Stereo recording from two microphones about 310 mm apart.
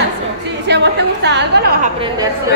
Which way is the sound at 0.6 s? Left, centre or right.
Right.